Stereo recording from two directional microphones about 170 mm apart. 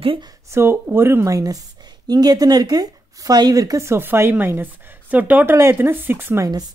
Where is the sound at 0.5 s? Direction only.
15° right (ahead or behind).